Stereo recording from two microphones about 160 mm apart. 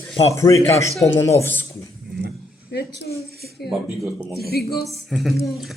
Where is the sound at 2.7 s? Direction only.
90° left.